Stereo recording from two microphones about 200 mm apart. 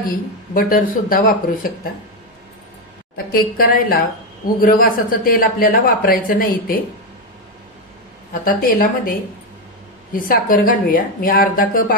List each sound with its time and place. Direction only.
0.1 s a man's voice: 45° left (ahead or behind)
3.3 s a man's voice: 45° left (ahead or behind)
8.3 s a man's voice: 45° left (ahead or behind)
10.1 s a man's voice: 45° left (ahead or behind)